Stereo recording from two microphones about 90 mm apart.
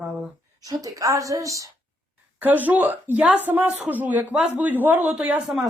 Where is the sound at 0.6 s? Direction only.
40° right (ahead or behind).